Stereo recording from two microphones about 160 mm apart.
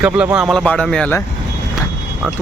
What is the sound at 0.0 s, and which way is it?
Speech, 5° right (ahead or behind).